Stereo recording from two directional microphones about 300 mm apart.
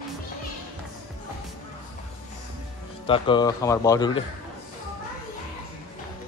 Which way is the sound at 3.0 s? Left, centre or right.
Centre.